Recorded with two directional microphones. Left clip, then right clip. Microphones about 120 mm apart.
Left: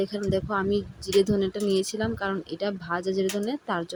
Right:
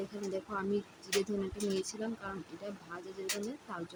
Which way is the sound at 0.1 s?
70° left (ahead or behind).